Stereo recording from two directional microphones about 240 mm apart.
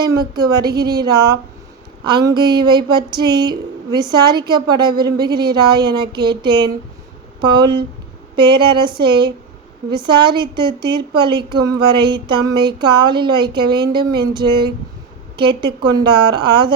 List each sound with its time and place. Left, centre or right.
0.3 s a woman's voice: centre